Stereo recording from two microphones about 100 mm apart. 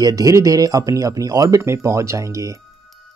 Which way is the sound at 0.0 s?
35° right (ahead or behind).